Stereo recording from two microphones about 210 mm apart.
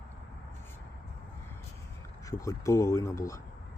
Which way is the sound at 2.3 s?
15° left (ahead or behind).